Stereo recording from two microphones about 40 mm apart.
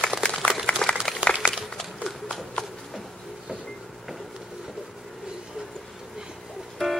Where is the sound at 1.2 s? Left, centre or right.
Right.